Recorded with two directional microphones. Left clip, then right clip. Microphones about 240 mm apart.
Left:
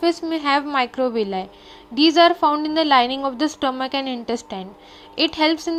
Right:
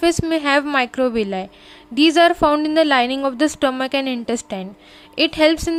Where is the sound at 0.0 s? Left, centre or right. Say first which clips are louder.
Right 3 dB; right.